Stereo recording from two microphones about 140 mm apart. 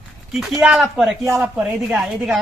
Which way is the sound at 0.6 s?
5° right (ahead or behind).